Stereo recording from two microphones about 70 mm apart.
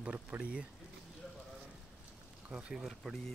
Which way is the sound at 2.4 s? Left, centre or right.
Centre.